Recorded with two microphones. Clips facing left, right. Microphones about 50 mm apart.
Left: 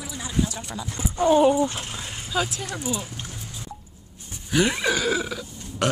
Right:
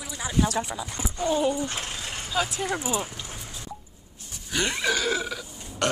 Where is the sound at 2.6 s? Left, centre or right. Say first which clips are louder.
Right 2 dB; right.